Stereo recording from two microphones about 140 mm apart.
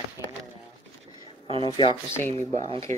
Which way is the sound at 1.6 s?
35° left (ahead or behind).